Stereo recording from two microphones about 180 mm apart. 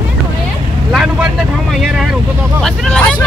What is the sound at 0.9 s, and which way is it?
Vehicle, 5° right (ahead or behind).